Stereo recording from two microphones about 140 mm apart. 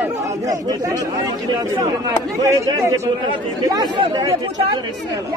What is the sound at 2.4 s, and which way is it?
Speech, 20° right (ahead or behind).